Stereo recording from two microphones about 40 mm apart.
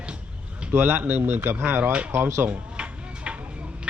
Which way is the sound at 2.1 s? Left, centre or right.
Right.